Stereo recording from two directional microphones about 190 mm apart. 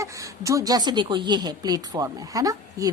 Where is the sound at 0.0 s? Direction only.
15° right (ahead or behind).